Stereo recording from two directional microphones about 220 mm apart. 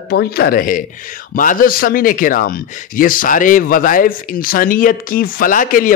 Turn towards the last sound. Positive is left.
turn(degrees=40)  # may be behind; listen again after turning